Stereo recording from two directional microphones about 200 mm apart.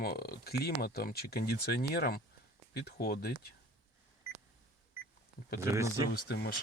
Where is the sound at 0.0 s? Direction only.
50° left (ahead or behind).